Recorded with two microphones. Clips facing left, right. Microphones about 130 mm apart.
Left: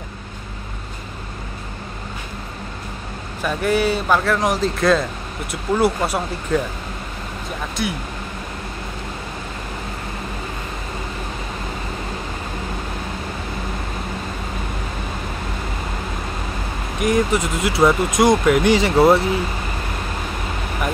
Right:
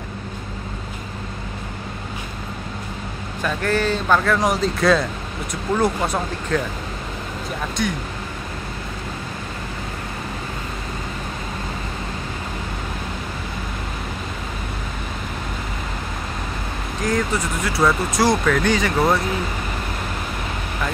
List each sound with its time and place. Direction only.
3.4 s speech: 10° left (ahead or behind)
17.0 s speech: 20° left (ahead or behind)